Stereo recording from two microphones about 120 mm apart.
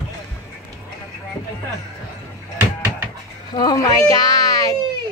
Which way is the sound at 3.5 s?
30° left (ahead or behind).